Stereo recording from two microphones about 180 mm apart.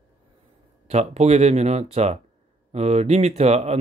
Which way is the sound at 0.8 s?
35° right (ahead or behind).